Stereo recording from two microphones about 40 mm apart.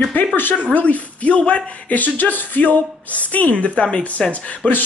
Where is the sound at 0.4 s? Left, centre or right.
Left.